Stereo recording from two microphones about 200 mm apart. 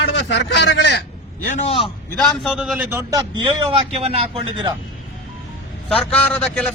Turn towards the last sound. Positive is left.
turn(degrees=5)  # may be behind; listen again after turning